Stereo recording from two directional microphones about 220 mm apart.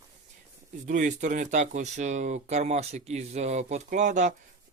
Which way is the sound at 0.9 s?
35° right (ahead or behind).